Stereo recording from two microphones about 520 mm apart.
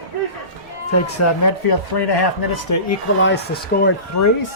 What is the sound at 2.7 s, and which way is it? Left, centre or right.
Speech, left.